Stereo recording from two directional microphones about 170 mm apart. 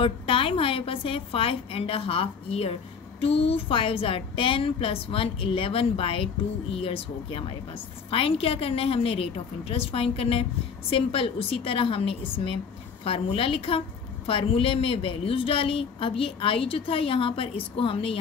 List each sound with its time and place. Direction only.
0.0 s a woman's voice: 30° left (ahead or behind)